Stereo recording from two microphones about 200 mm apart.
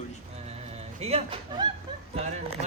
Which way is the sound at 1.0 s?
30° right (ahead or behind).